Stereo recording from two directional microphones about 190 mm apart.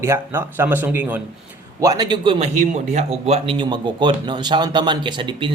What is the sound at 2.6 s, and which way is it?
Speech, 40° right (ahead or behind).